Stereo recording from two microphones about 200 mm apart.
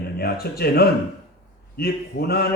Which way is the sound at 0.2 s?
50° left (ahead or behind).